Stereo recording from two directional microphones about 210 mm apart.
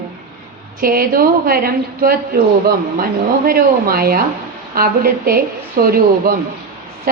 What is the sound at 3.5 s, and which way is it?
A woman's voice, 45° right (ahead or behind).